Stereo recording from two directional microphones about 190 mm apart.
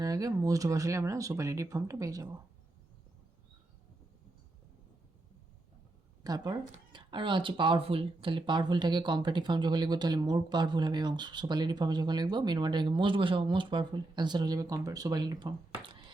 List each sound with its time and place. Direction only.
0.0 s speech: 20° right (ahead or behind)
6.2 s speech: 20° right (ahead or behind)